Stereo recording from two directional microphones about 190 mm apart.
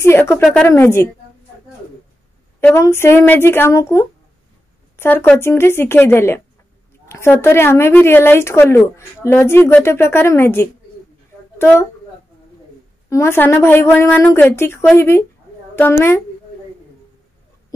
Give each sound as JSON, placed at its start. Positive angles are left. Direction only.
{"t": 0.0, "sound": "a woman's voice", "side_deg": 15}
{"t": 2.6, "sound": "a woman's voice", "side_deg": 15}
{"t": 11.5, "sound": "a sound", "side_deg": 10}
{"t": 13.1, "sound": "a woman's voice", "side_deg": 15}